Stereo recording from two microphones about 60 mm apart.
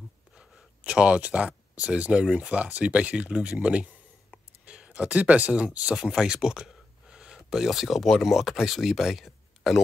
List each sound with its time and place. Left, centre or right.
0.3 s speech: centre
5.9 s speech: centre